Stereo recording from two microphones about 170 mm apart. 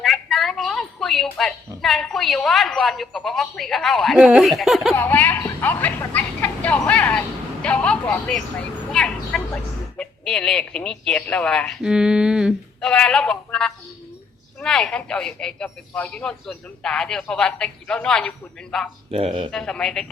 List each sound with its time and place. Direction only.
0.0 s a woman's voice: centre (ahead or behind)
4.9 s a sound: 10° left (ahead or behind)
10.0 s speech: 5° left (ahead or behind)
19.1 s speech: 30° right (ahead or behind)
19.5 s speech: 5° left (ahead or behind)